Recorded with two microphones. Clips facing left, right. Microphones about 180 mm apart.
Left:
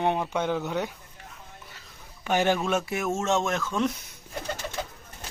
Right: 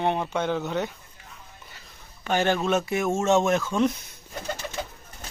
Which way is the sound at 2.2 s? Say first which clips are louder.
Right 1 dB; 10° left (ahead or behind).